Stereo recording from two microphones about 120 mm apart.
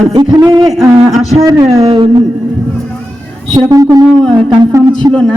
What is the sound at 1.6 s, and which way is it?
Speech, 50° right (ahead or behind).